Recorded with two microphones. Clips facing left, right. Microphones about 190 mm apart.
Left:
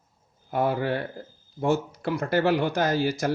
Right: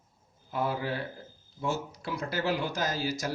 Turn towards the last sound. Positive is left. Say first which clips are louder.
# left 7 dB
turn(degrees=60)  # may be behind; listen again after turning